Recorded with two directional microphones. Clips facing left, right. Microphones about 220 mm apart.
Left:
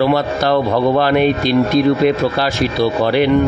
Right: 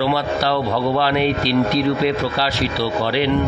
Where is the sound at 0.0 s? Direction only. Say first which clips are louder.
Left 5 dB; 50° left (ahead or behind).